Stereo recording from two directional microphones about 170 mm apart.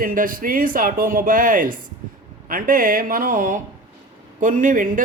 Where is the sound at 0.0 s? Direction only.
55° right (ahead or behind).